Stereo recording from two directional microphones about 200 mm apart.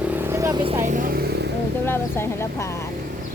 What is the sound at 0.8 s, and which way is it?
Speech, 45° right (ahead or behind).